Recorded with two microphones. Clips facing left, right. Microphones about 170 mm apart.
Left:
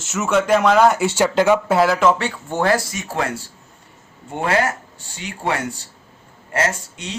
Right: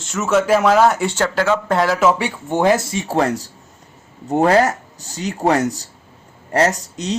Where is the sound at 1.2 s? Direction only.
15° left (ahead or behind).